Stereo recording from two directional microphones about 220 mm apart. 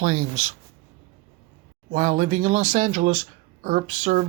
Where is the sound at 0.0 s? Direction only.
40° right (ahead or behind).